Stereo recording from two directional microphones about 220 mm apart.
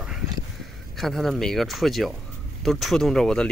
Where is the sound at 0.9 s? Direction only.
Centre (ahead or behind).